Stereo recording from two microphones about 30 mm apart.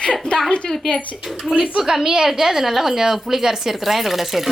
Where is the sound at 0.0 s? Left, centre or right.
Left.